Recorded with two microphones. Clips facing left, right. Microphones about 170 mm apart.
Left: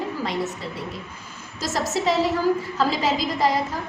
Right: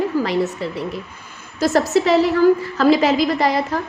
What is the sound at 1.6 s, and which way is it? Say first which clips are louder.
A woman's voice: right 9 dB; 60° right (ahead or behind).